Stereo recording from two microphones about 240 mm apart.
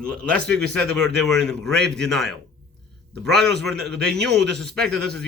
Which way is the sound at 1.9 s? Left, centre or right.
Centre.